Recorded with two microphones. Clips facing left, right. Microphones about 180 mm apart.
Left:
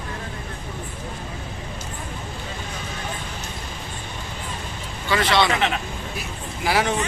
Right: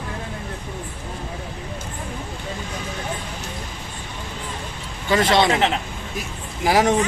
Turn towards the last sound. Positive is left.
turn(degrees=-45)  # may be behind; listen again after turning